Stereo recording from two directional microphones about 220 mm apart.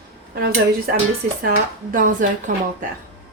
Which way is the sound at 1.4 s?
40° right (ahead or behind).